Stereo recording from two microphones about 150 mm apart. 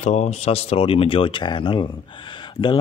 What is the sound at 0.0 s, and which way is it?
Speech, 50° left (ahead or behind).